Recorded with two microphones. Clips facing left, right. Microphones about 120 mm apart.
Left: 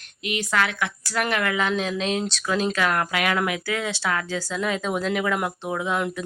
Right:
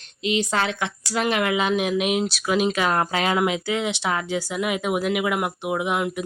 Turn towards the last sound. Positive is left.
turn(degrees=-15)  # may be behind; listen again after turning